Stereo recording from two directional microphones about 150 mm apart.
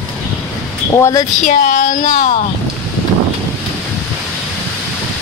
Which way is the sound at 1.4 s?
60° left (ahead or behind).